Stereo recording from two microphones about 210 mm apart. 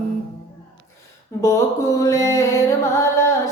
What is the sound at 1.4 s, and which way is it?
Music, 15° left (ahead or behind).